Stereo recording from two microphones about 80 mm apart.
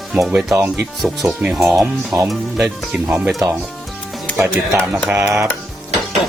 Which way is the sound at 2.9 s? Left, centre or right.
Centre.